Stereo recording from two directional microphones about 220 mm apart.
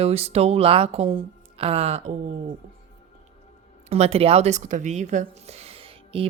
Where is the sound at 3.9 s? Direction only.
30° right (ahead or behind).